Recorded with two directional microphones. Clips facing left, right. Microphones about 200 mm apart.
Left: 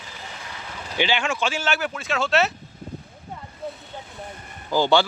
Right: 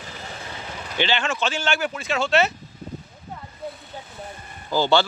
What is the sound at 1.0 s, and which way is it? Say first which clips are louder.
Speech: even; 10° left (ahead or behind).